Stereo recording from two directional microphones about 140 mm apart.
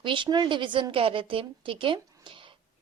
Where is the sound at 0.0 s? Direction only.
35° right (ahead or behind).